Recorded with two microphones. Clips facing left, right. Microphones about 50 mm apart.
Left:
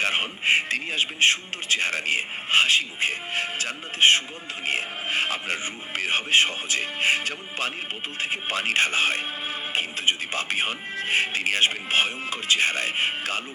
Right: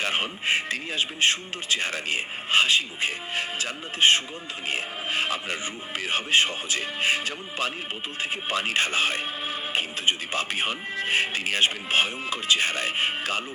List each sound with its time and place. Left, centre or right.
0.0 s speech: left